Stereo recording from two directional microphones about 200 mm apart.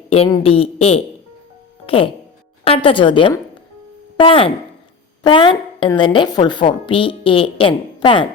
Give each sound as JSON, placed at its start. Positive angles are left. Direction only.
{"t": 0.3, "sound": "a woman's voice", "side_deg": 30}
{"t": 2.6, "sound": "a woman's voice", "side_deg": 25}